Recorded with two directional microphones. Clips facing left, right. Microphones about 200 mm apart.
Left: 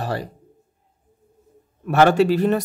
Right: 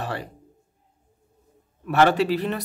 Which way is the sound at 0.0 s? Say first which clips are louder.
Left 4 dB; 40° left (ahead or behind).